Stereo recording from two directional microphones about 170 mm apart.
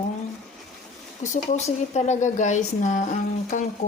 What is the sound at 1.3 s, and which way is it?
Speech, 45° left (ahead or behind).